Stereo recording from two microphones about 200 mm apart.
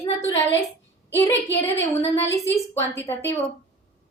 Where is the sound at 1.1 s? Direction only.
10° left (ahead or behind).